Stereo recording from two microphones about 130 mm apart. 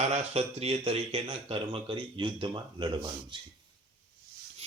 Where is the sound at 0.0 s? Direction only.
55° right (ahead or behind); by 3.3 s 35° right (ahead or behind).